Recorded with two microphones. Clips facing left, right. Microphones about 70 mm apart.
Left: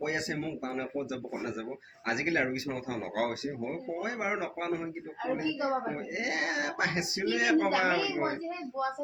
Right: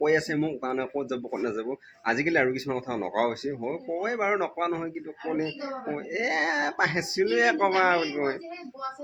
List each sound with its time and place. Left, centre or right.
0.0 s speech: right
0.3 s speech: right
6.1 s speech: right